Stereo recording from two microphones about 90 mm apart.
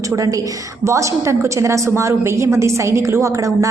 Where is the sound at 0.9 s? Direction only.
35° right (ahead or behind).